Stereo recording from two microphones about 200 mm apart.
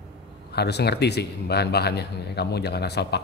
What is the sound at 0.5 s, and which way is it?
Speech, 55° left (ahead or behind).